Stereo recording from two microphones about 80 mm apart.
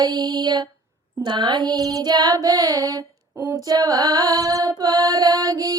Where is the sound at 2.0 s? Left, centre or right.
Right.